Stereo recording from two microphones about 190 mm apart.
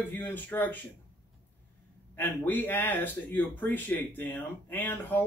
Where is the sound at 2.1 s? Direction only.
10° left (ahead or behind).